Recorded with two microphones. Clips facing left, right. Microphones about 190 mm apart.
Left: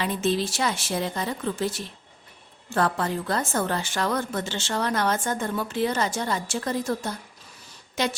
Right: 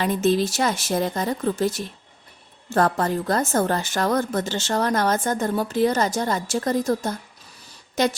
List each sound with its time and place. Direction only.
0.0 s a woman's voice: 45° right (ahead or behind)